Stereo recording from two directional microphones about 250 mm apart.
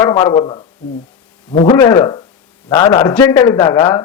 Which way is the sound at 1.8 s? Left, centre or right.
Centre.